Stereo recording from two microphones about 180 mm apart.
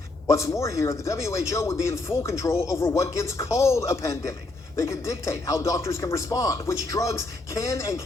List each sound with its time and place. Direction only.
0.3 s a man's voice: 15° left (ahead or behind)